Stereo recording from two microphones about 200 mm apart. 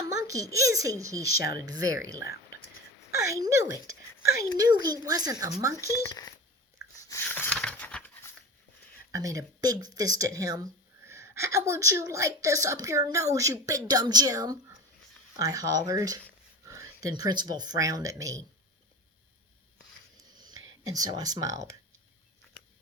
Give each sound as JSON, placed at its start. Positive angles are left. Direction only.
{"t": 0.1, "sound": "a sound", "side_deg": -15}
{"t": 0.7, "sound": "speech", "side_deg": -15}
{"t": 1.3, "sound": "speech", "side_deg": 50}
{"t": 1.5, "sound": "speech", "side_deg": -20}
{"t": 2.2, "sound": "a sound", "side_deg": 50}
{"t": 3.2, "sound": "speech", "side_deg": -15}
{"t": 5.9, "sound": "speech", "side_deg": 20}
{"t": 7.1, "sound": "a sound", "side_deg": 10}
{"t": 9.1, "sound": "speech", "side_deg": -15}
{"t": 20.3, "sound": "whispering", "side_deg": -20}
{"t": 20.8, "sound": "speech", "side_deg": -20}